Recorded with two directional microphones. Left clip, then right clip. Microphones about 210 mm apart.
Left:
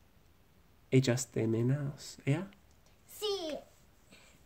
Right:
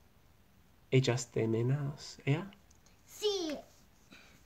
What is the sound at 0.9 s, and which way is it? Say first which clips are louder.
Speech: left 1 dB; 30° left (ahead or behind).